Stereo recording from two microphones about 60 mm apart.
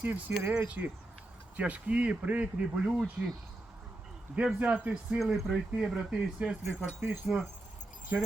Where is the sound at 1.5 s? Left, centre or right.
Right.